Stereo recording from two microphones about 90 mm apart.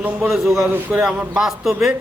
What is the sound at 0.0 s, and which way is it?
Speech, 20° right (ahead or behind).